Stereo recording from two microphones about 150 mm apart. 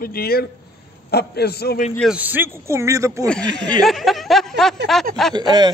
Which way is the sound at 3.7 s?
5° left (ahead or behind).